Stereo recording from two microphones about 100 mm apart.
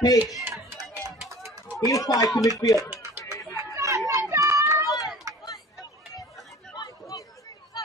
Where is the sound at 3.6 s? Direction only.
35° right (ahead or behind).